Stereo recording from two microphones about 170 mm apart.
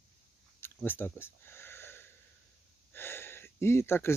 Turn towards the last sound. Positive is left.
turn(degrees=15)  # may be behind; listen again after turning